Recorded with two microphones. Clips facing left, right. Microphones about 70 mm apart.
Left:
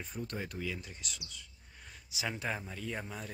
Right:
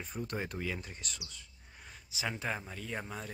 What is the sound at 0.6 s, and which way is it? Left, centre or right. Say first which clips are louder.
Speech: right 1 dB; right.